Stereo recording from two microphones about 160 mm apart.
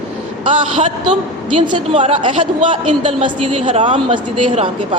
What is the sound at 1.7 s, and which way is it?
A woman's voice, 40° right (ahead or behind).